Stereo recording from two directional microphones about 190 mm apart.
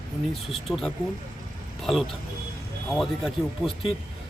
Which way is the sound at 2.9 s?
Centre (ahead or behind).